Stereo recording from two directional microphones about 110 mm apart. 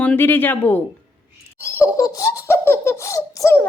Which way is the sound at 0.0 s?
15° left (ahead or behind).